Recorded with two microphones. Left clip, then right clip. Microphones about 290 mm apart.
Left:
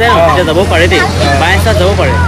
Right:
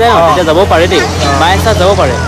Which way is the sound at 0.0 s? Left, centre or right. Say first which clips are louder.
Right 1 dB; centre.